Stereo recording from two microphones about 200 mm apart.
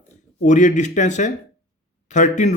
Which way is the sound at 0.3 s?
40° left (ahead or behind).